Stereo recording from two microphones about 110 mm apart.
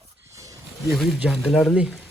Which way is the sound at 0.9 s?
Centre (ahead or behind).